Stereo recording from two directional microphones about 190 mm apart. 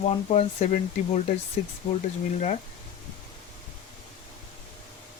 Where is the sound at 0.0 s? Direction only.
35° left (ahead or behind).